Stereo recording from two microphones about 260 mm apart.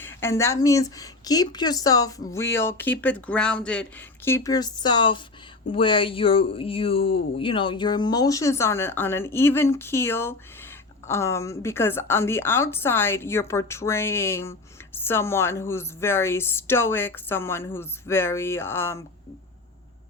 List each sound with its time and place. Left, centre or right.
0.0 s speech: centre